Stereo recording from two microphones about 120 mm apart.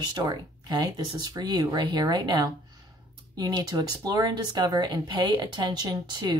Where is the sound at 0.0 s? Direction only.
40° right (ahead or behind).